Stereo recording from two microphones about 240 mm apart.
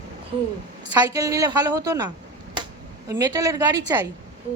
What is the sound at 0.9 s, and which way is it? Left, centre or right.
A woman's voice, centre.